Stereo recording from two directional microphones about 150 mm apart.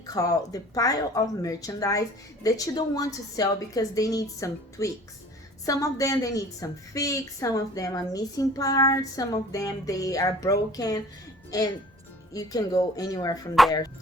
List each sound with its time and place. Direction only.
0.1 s a woman's voice: 25° left (ahead or behind)